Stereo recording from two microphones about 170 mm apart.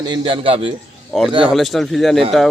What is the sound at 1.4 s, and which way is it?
Speech, centre (ahead or behind).